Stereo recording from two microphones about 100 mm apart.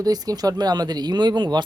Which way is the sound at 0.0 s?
40° right (ahead or behind).